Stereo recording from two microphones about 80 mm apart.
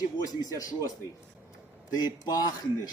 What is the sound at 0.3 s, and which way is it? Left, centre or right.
A man's voice, left.